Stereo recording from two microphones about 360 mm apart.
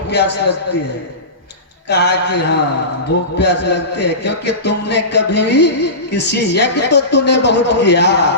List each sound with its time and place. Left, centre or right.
0.1 s a man's voice: left
1.9 s a man's voice: left